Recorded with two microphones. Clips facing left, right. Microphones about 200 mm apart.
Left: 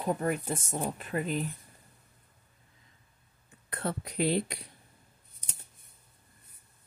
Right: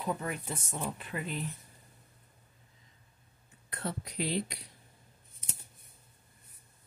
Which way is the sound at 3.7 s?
55° left (ahead or behind).